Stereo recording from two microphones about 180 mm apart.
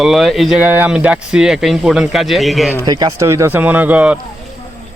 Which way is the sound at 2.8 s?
20° right (ahead or behind).